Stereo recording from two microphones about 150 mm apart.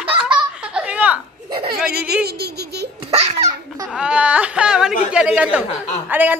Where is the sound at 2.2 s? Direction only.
90° right.